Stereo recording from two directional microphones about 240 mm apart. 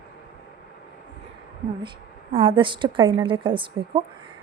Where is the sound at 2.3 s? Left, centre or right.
Right.